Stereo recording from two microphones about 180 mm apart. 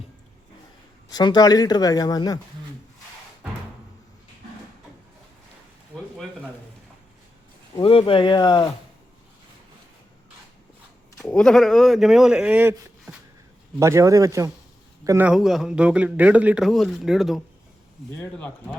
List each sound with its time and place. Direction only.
1.1 s speech: 25° left (ahead or behind)
7.8 s speech: 30° left (ahead or behind)
11.2 s a man's voice: 5° left (ahead or behind); by 15.3 s 15° right (ahead or behind)
15.3 s a man's voice: centre (ahead or behind)
18.2 s speech: 10° left (ahead or behind)